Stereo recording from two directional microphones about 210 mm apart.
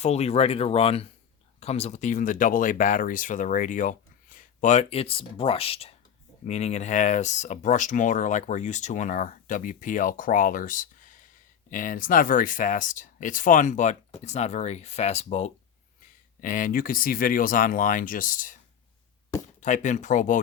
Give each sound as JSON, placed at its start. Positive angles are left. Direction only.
{"t": 0.0, "sound": "speech", "side_deg": 30}